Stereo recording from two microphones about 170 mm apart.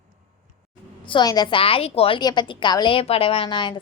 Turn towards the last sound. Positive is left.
turn(degrees=30)  # may be behind; listen again after turning